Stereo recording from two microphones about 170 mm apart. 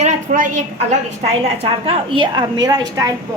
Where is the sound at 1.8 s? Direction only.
30° right (ahead or behind).